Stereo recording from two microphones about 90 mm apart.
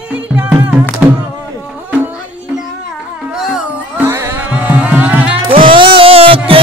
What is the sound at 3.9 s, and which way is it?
Music, 30° right (ahead or behind).